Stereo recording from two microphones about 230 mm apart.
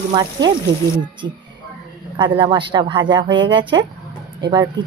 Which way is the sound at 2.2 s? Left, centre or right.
Centre.